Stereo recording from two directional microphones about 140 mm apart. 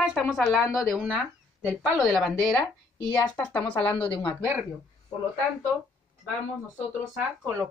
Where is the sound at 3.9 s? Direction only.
40° left (ahead or behind).